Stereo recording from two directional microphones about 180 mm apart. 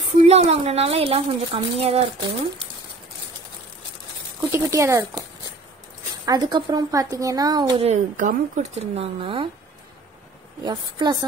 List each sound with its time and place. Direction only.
0.3 s a woman's voice: 35° right (ahead or behind)
4.5 s speech: 15° right (ahead or behind)
6.2 s speech: 20° right (ahead or behind)
7.8 s a woman's voice: 40° right (ahead or behind)
10.6 s speech: 25° right (ahead or behind)